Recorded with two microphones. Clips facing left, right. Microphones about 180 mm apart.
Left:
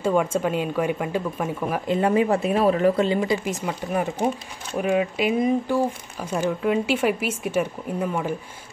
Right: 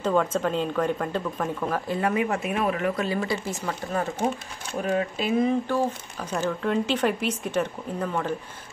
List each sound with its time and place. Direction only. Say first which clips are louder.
0.0 s speech: left 2 dB; 10° left (ahead or behind)
2.0 s speech: left 6 dB; 30° left (ahead or behind)
3.2 s speech: left 4 dB; 15° left (ahead or behind)